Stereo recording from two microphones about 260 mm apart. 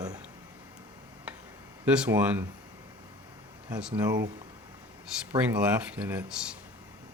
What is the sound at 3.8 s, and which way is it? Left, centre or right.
Speech, centre.